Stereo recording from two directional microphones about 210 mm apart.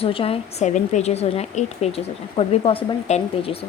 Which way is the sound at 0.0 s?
25° left (ahead or behind).